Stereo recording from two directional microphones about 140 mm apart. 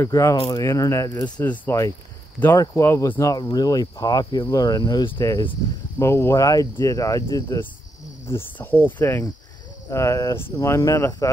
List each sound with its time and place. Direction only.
0.0 s speech: 25° left (ahead or behind)
1.4 s speech: 10° left (ahead or behind); by 5.2 s 35° left (ahead or behind)
5.9 s speech: 20° left (ahead or behind)
8.3 s speech: 15° left (ahead or behind)